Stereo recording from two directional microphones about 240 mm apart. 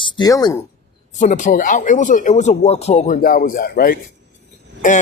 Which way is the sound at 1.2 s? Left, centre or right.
Left.